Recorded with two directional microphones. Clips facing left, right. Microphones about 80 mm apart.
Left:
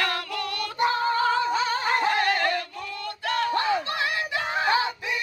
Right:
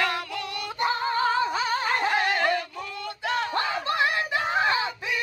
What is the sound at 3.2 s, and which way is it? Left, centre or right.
Battle cry, centre.